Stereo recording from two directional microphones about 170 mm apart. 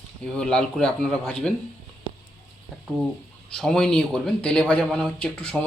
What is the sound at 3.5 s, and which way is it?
Speech, 5° left (ahead or behind).